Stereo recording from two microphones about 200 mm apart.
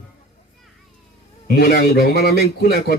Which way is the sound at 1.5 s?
50° left (ahead or behind).